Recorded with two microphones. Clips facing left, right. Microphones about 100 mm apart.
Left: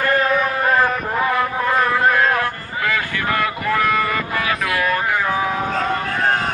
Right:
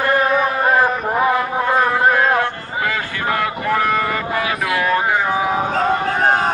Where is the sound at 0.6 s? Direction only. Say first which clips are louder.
Right 2 dB; 20° right (ahead or behind).